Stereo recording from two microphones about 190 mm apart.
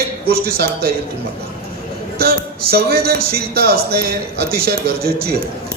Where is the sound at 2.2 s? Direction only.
55° right (ahead or behind).